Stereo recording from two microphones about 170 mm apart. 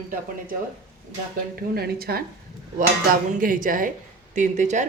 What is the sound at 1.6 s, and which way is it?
Speech, 65° right (ahead or behind).